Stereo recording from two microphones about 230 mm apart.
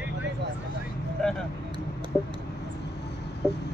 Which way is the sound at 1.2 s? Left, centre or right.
Centre.